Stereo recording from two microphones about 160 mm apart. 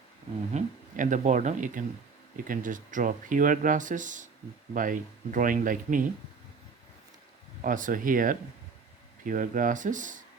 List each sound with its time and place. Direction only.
0.5 s speech: 50° right (ahead or behind)
7.6 s speech: 55° right (ahead or behind)